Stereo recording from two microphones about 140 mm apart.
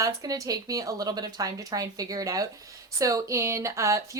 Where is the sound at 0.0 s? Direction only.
25° right (ahead or behind).